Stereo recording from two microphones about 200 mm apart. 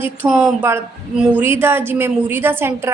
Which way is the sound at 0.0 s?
5° right (ahead or behind).